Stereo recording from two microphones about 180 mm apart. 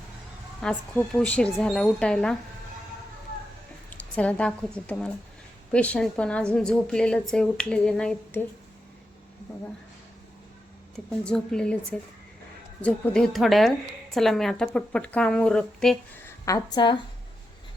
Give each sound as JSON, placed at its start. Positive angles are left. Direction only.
{"t": 0.6, "sound": "a woman's voice", "side_deg": 5}
{"t": 3.8, "sound": "a woman's voice", "side_deg": 5}
{"t": 10.9, "sound": "a woman's voice", "side_deg": 5}
{"t": 16.2, "sound": "a woman's voice", "side_deg": 20}